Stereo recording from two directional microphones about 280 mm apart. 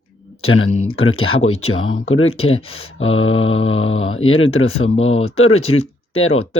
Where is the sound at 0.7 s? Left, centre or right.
Left.